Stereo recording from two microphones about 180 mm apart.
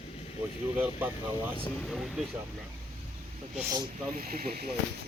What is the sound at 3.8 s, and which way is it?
Speech, 55° right (ahead or behind).